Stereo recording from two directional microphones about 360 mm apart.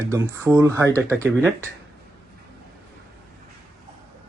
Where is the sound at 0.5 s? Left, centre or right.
Centre.